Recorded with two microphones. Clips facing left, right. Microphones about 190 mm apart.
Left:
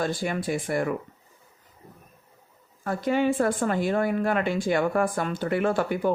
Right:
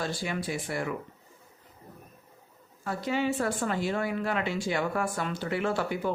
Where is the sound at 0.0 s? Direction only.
50° left (ahead or behind).